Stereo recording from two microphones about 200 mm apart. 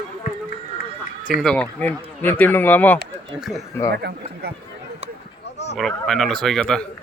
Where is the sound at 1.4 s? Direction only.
5° left (ahead or behind).